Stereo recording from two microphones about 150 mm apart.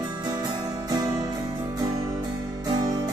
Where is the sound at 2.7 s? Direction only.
25° right (ahead or behind).